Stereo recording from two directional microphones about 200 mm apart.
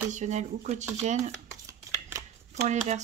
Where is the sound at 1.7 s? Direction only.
15° right (ahead or behind).